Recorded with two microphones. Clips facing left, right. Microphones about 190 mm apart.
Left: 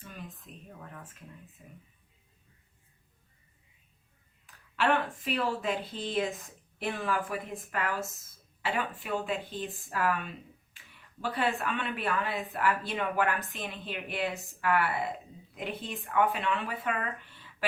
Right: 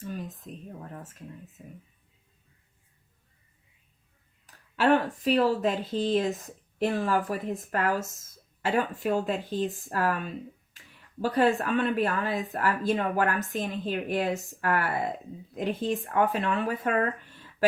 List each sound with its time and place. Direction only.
0.1 s speech: 40° right (ahead or behind)
4.5 s speech: 40° right (ahead or behind)
11.2 s speech: 40° right (ahead or behind)